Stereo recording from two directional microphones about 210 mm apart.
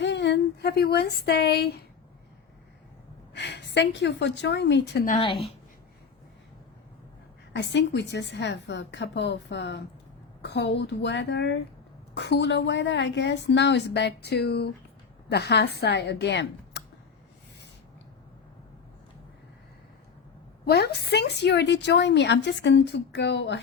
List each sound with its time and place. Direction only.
0.0 s speech: 55° left (ahead or behind)
3.3 s a woman's voice: 55° left (ahead or behind)
7.5 s a woman's voice: 55° left (ahead or behind)
20.7 s a woman's voice: 50° left (ahead or behind)